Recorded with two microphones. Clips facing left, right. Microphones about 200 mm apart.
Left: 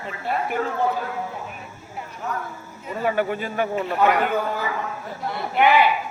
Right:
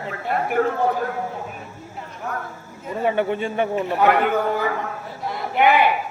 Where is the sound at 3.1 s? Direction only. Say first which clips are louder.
Right 2 dB; 25° right (ahead or behind).